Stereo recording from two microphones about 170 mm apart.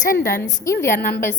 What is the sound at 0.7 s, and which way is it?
Speech, 20° left (ahead or behind).